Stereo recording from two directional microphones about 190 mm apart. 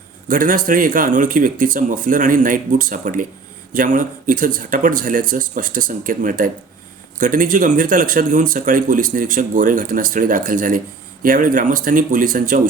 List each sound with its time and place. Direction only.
0.3 s speech: 45° right (ahead or behind)